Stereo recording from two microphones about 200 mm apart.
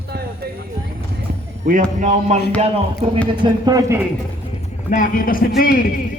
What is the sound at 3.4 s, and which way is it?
Speech, 20° right (ahead or behind).